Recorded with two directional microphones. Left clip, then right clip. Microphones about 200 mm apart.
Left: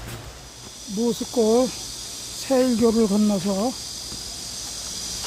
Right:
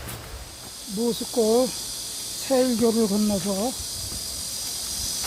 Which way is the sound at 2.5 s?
15° left (ahead or behind).